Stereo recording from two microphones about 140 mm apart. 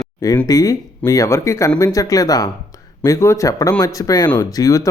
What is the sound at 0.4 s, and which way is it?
Speech, 25° left (ahead or behind).